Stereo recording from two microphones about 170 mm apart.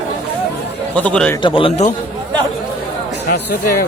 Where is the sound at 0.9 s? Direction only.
5° left (ahead or behind).